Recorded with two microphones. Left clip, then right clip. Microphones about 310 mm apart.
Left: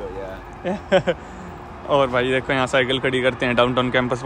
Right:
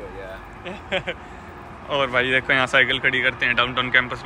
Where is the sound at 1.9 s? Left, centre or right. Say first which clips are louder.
Left 2 dB; centre.